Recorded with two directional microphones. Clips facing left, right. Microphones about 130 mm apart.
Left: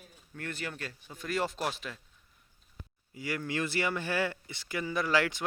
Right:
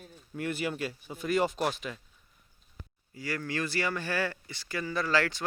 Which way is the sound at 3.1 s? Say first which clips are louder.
Even; 20° left (ahead or behind).